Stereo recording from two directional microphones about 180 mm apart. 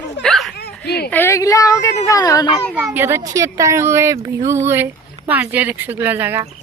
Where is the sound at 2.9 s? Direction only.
15° right (ahead or behind).